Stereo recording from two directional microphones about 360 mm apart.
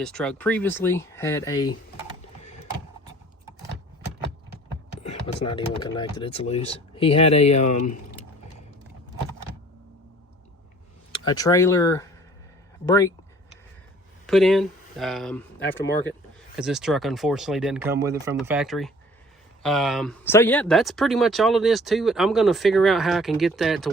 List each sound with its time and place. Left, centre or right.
0.0 s speech: centre
5.2 s speech: centre
11.1 s speech: centre
14.3 s speech: centre